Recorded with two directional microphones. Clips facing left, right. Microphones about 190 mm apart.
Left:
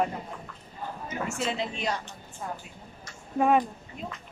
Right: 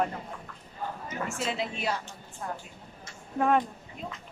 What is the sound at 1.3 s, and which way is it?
Speech, centre (ahead or behind).